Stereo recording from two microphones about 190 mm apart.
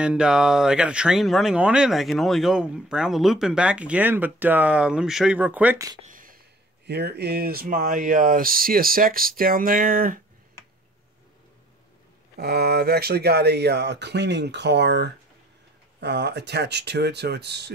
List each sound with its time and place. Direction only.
0.0 s speech: 5° right (ahead or behind)
6.0 s a sound: 45° right (ahead or behind)
6.9 s speech: 60° right (ahead or behind)
12.4 s speech: 60° right (ahead or behind)